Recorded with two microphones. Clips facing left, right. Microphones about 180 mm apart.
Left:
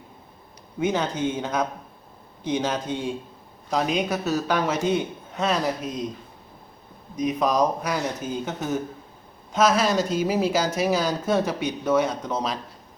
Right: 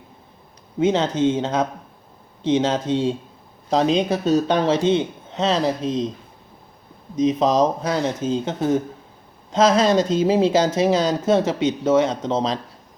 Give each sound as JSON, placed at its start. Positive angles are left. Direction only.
{"t": 0.8, "sound": "speech", "side_deg": -25}
{"t": 7.2, "sound": "speech", "side_deg": -25}